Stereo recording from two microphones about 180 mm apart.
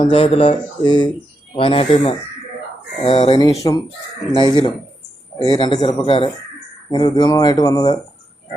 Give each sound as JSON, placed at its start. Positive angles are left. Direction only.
{"t": 0.0, "sound": "speech", "side_deg": 30}
{"t": 3.6, "sound": "speech", "side_deg": 25}